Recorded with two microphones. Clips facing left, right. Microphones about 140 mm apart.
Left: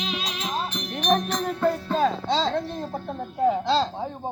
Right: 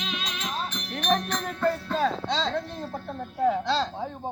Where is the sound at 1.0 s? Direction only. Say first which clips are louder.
Left 3 dB; 10° left (ahead or behind).